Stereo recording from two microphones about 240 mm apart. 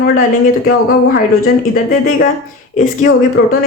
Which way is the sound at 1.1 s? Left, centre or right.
Left.